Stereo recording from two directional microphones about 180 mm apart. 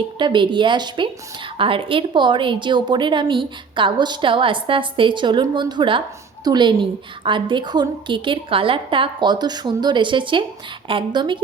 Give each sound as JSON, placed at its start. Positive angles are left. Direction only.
{"t": 0.2, "sound": "a woman's voice", "side_deg": -25}